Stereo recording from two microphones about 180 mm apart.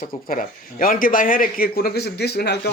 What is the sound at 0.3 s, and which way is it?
A man's voice, 50° left (ahead or behind).